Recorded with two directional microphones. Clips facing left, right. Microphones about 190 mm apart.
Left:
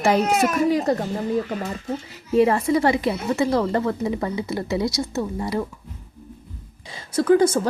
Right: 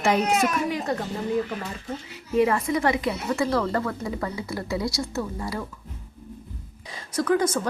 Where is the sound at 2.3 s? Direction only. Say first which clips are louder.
Left 4 dB; 30° left (ahead or behind).